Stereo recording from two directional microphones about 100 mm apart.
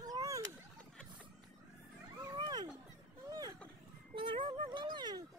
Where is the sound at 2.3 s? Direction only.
45° right (ahead or behind).